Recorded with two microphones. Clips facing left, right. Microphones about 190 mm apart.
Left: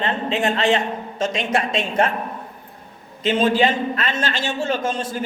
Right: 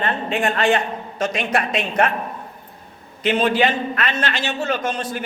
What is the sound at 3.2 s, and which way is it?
A man's voice, 25° left (ahead or behind).